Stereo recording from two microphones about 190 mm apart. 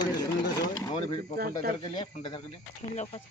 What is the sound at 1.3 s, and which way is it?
Speech, 50° right (ahead or behind).